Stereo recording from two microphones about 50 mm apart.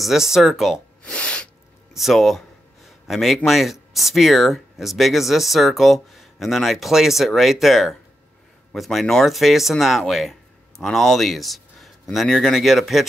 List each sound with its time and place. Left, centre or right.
0.0 s speech: centre
1.0 s sneeze: centre
2.0 s a man's voice: centre